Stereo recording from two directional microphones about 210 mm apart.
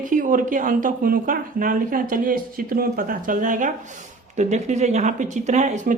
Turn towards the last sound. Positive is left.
turn(degrees=-35)  # may be behind; listen again after turning